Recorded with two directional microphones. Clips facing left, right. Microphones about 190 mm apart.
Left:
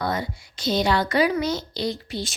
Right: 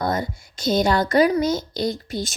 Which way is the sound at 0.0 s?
45° right (ahead or behind).